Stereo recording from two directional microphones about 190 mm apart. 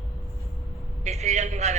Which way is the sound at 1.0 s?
35° right (ahead or behind).